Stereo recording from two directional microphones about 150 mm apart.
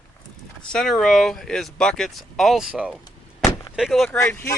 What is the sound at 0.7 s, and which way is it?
Speech, 5° left (ahead or behind).